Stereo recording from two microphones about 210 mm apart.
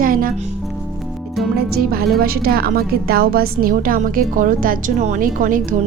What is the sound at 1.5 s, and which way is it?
A woman's voice, 45° right (ahead or behind).